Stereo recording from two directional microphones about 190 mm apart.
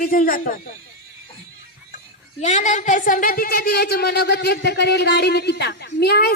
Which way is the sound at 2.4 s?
40° left (ahead or behind).